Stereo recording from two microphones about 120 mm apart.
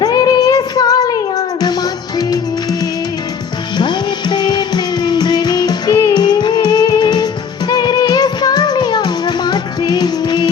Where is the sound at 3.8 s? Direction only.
35° left (ahead or behind).